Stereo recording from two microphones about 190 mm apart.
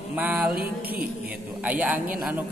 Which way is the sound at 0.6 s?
55° right (ahead or behind).